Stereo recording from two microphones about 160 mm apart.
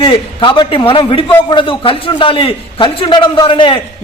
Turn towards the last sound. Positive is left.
turn(degrees=35)  # may be behind; listen again after turning